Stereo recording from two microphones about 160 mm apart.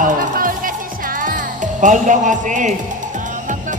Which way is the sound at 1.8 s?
50° right (ahead or behind).